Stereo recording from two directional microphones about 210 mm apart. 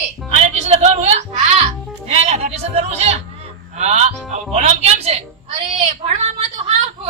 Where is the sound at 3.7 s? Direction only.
30° right (ahead or behind).